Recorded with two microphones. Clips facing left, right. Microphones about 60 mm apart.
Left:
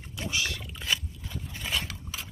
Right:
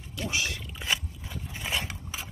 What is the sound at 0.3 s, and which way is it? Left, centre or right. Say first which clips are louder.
Pig: even; right.